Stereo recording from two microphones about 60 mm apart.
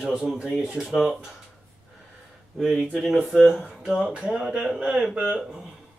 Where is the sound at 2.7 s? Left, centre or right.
Centre.